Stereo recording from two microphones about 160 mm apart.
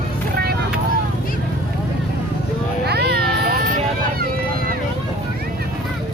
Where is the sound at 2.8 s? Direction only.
90° right; by 3.6 s 75° right (ahead or behind).